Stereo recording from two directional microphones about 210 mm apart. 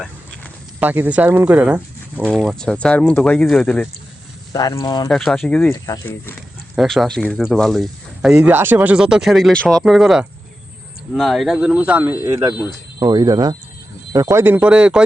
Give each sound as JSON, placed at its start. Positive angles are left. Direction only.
{"t": 0.8, "sound": "speech", "side_deg": -10}
{"t": 4.5, "sound": "speech", "side_deg": 15}
{"t": 5.0, "sound": "speech", "side_deg": 0}
{"t": 5.8, "sound": "speech", "side_deg": 15}
{"t": 6.7, "sound": "speech", "side_deg": 0}